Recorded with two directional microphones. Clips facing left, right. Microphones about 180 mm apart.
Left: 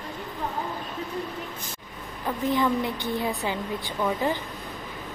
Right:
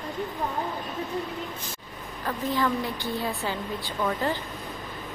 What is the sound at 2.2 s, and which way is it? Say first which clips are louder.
A woman's voice: left 2 dB; 15° left (ahead or behind).